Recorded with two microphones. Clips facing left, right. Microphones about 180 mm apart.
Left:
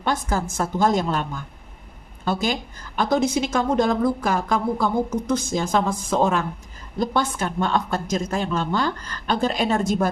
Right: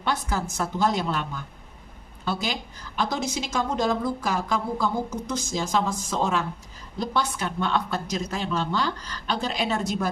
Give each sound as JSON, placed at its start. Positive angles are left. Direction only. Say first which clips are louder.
{"t": 0.0, "sound": "a woman's voice", "louder": "left 3 dB", "side_deg": 45}